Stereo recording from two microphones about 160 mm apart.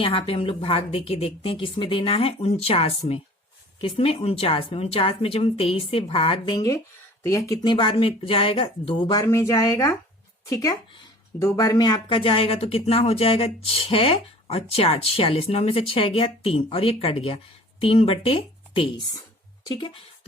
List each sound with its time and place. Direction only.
0.0 s speech: 35° left (ahead or behind)